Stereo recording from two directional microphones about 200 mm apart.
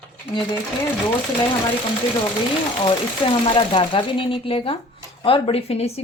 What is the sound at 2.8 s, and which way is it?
Speech, 25° left (ahead or behind).